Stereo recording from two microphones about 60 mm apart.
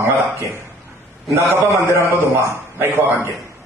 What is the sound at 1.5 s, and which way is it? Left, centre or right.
A man's voice, right.